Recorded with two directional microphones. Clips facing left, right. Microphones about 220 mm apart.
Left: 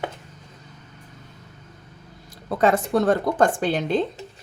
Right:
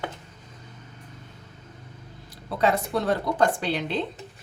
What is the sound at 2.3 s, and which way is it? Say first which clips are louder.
Speech: left 4 dB; 50° left (ahead or behind).